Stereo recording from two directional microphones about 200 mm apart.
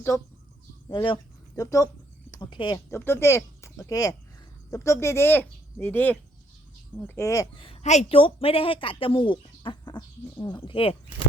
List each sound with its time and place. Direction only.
0.1 s a woman's voice: 15° left (ahead or behind)